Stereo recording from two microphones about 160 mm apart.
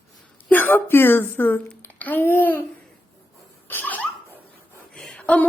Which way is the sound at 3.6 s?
10° left (ahead or behind).